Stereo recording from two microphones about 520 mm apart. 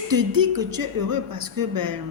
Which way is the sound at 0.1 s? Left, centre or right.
Right.